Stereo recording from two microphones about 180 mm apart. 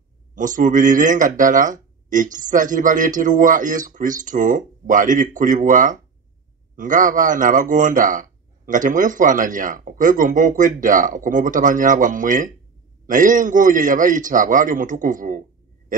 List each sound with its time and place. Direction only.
0.3 s a man's voice: 45° right (ahead or behind)